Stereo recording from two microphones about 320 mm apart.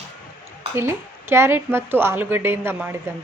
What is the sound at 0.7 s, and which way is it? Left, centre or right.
A woman's voice, centre.